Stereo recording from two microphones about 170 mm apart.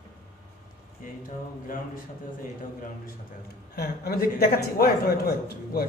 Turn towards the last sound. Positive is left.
turn(degrees=60)  # may be behind; listen again after turning